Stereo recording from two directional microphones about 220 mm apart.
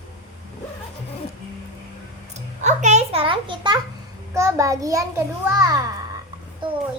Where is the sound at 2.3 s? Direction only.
30° right (ahead or behind); by 5.8 s 15° right (ahead or behind).